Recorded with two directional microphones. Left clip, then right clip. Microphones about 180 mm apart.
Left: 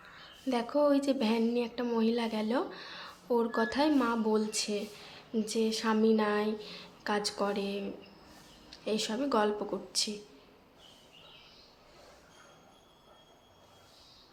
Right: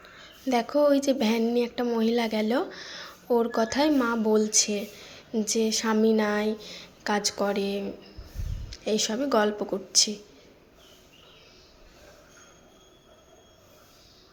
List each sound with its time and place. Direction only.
0.4 s speech: 20° right (ahead or behind)